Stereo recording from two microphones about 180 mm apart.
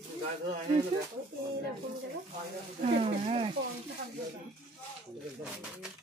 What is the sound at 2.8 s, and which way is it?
Speech, 30° right (ahead or behind).